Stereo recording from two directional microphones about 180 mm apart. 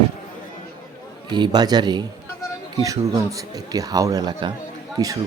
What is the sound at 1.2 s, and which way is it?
Speech, 25° right (ahead or behind).